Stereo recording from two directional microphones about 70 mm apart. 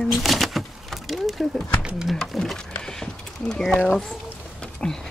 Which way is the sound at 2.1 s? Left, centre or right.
Centre.